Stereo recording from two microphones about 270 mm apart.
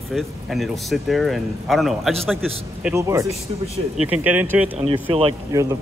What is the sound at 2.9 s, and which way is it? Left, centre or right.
A man's voice, centre.